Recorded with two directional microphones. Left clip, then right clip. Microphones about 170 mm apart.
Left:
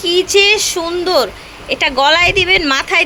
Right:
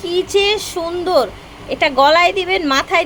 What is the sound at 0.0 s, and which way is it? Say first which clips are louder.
A woman's voice: left 5 dB; 5° right (ahead or behind).